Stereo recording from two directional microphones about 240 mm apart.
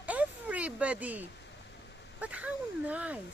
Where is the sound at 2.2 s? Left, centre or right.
Centre.